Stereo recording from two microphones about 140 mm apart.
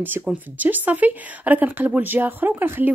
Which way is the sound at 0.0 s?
15° right (ahead or behind).